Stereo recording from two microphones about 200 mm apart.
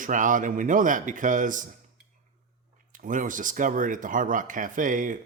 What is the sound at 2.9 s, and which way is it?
Speech, 40° right (ahead or behind).